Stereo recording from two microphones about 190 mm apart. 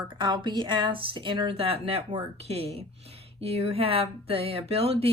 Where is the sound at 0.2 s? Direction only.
25° right (ahead or behind).